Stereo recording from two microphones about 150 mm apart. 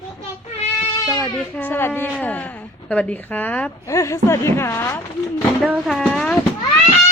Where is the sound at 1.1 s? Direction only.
10° left (ahead or behind).